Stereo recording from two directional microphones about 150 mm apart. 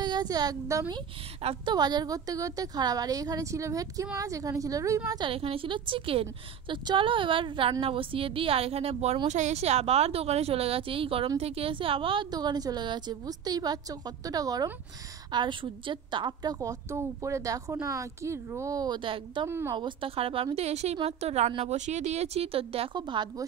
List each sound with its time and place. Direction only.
0.0 s a woman's voice: 30° right (ahead or behind)
1.4 s speech: 40° right (ahead or behind)
1.8 s a woman's voice: 25° right (ahead or behind)
5.3 s a woman's voice: 40° right (ahead or behind)
19.4 s a woman's voice: 20° right (ahead or behind)
19.8 s speech: 35° right (ahead or behind)